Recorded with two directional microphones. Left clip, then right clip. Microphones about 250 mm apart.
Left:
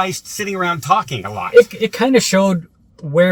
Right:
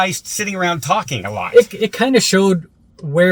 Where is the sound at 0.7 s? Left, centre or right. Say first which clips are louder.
Left 4 dB; centre.